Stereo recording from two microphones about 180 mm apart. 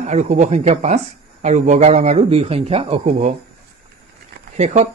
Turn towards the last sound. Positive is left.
turn(degrees=-40)  # may be behind; listen again after turning